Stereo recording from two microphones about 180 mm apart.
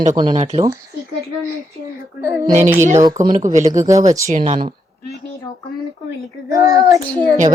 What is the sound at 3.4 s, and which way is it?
Speech, 45° right (ahead or behind).